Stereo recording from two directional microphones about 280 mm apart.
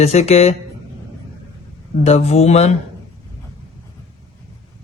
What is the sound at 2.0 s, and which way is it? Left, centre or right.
Speech, left.